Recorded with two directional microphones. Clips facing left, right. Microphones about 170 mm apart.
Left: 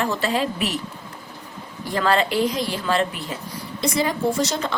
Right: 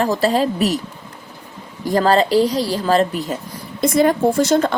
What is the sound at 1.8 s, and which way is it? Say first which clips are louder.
A woman's voice: right 6 dB; 40° right (ahead or behind).